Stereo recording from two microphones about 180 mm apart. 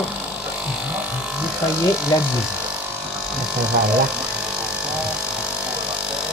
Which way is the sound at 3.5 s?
5° right (ahead or behind).